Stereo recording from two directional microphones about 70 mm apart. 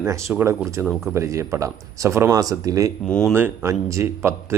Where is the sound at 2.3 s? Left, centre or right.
Right.